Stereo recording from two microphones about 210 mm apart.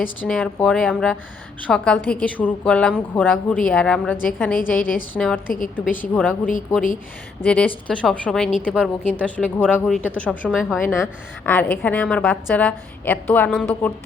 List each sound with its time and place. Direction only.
0.3 s a woman's voice: 5° left (ahead or behind)
4.5 s a woman's voice: 40° left (ahead or behind)
5.1 s a woman's voice: 5° left (ahead or behind)